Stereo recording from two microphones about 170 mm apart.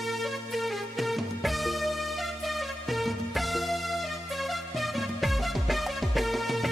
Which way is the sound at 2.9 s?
Centre (ahead or behind).